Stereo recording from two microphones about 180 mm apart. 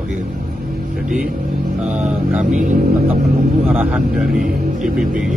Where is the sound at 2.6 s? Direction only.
45° right (ahead or behind).